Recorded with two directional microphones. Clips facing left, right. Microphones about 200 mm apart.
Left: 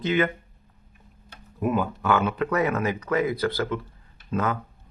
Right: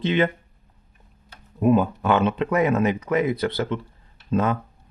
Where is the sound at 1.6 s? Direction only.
25° right (ahead or behind).